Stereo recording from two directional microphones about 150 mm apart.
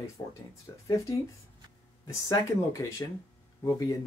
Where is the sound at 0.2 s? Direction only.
20° left (ahead or behind).